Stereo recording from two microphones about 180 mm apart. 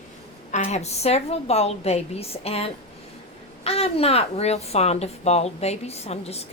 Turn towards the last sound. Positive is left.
turn(degrees=35)  # may be behind; listen again after turning